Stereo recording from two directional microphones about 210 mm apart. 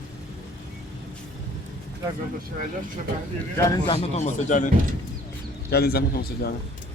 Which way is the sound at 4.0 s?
35° left (ahead or behind).